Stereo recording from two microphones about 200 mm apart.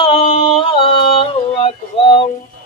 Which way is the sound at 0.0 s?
25° left (ahead or behind).